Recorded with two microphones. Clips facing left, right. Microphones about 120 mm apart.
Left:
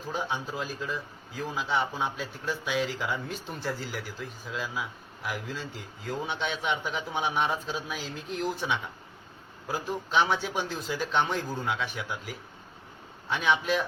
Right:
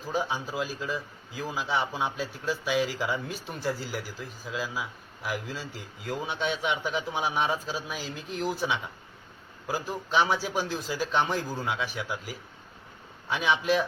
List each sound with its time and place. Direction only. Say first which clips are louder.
0.1 s a man's voice: right 2 dB; 5° right (ahead or behind)